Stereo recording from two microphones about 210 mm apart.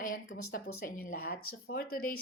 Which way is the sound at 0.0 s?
40° left (ahead or behind).